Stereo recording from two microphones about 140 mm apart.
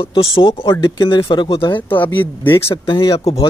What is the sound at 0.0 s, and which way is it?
Speech, 40° left (ahead or behind).